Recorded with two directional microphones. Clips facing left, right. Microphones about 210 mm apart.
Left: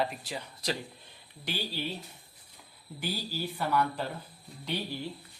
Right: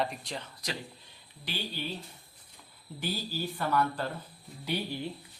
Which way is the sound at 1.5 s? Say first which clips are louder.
Left 2 dB; 45° left (ahead or behind).